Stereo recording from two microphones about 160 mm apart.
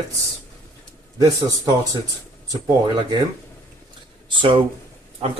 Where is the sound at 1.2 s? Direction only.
20° right (ahead or behind).